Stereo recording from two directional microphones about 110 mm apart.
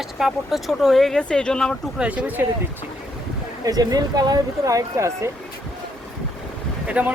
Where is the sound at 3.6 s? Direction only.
35° right (ahead or behind).